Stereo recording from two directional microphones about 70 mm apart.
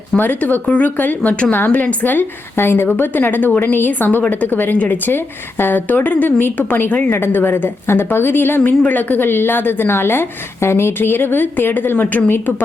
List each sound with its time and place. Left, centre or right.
0.2 s a woman's voice: left